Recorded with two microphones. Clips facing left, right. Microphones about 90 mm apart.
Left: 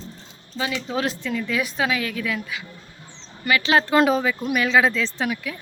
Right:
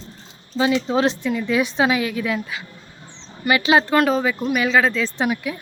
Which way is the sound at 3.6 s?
5° right (ahead or behind).